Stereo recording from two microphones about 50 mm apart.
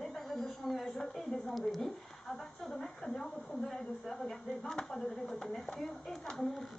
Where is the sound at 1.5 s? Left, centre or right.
Centre.